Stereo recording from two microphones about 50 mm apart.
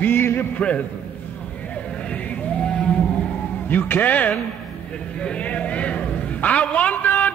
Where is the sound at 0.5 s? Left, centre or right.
Left.